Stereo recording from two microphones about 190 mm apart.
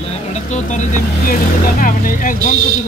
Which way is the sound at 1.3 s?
45° left (ahead or behind).